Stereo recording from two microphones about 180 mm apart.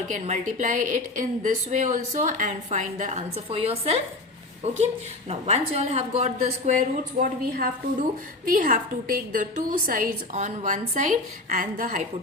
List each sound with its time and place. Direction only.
0.1 s a woman's voice: 45° right (ahead or behind)